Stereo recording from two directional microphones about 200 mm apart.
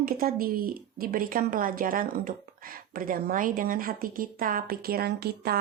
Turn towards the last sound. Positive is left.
turn(degrees=-50)  # may be behind; listen again after turning